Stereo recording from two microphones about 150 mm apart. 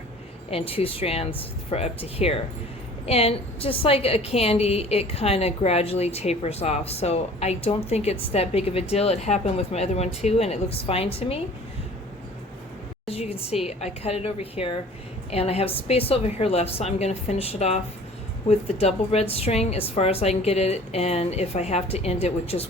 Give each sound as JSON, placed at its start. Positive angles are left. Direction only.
{"t": 0.5, "sound": "a woman's voice", "side_deg": 40}
{"t": 13.1, "sound": "a sound", "side_deg": 40}
{"t": 13.7, "sound": "a woman's voice", "side_deg": 45}